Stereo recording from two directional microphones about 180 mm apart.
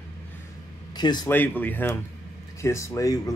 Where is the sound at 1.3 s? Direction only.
10° left (ahead or behind).